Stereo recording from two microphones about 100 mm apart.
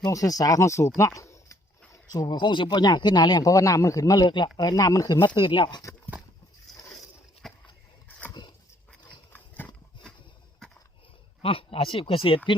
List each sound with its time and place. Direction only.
0.0 s speech: 35° left (ahead or behind)
2.2 s speech: 50° left (ahead or behind)
4.3 s speech: 50° left (ahead or behind)
7.4 s a sound: centre (ahead or behind)
8.3 s dog: 45° left (ahead or behind)
10.6 s a sound: 5° left (ahead or behind)
11.4 s speech: 65° left (ahead or behind)